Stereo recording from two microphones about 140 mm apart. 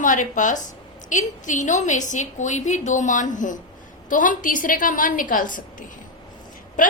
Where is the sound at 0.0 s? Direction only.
65° left (ahead or behind).